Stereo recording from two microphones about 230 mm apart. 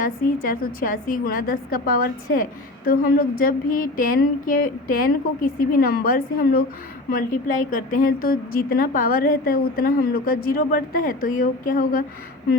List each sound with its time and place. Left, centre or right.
0.4 s a woman's voice: left